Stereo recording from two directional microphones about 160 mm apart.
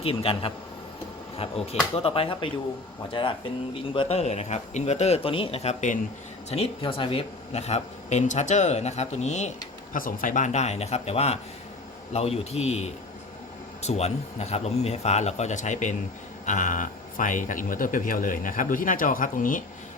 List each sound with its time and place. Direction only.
0.0 s a man's voice: 35° left (ahead or behind)
9.9 s a man's voice: 60° left (ahead or behind)